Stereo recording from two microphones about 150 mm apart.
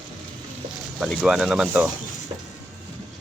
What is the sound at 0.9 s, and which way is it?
Speech, 10° left (ahead or behind).